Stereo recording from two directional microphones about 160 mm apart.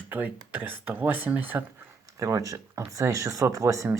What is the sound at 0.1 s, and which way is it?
Speech, 10° right (ahead or behind).